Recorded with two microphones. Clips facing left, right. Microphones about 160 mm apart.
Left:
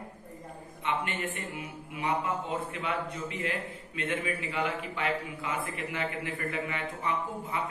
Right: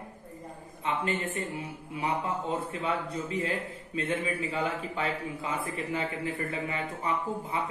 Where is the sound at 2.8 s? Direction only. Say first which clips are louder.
Right 2 dB; 30° right (ahead or behind).